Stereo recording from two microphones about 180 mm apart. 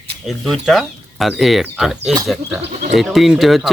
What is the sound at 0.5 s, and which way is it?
Speech, centre (ahead or behind).